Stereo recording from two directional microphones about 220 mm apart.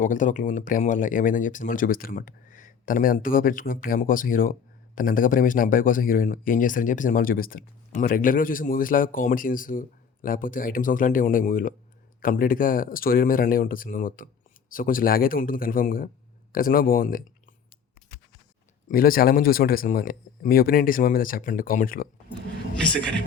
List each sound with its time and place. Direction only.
0.0 s speech: 35° left (ahead or behind)
18.9 s speech: 40° left (ahead or behind)
22.8 s speech: 5° left (ahead or behind)